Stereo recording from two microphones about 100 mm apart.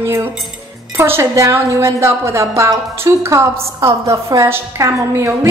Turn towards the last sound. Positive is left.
turn(degrees=-30)  # may be behind; listen again after turning